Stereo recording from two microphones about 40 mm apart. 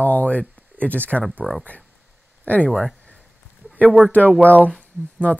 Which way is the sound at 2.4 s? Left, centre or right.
Left.